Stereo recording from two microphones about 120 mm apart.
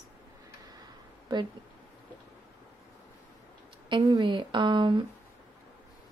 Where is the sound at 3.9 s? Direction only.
40° right (ahead or behind).